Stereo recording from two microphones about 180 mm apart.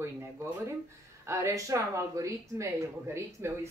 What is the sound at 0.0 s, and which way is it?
Speech, 15° right (ahead or behind).